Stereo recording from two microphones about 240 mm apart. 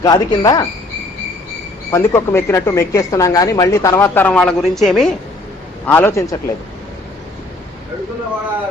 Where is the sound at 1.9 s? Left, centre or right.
Centre.